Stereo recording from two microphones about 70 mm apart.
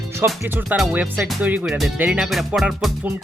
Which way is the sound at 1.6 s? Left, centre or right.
Centre.